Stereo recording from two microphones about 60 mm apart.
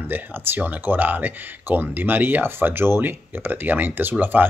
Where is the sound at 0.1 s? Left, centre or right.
Right.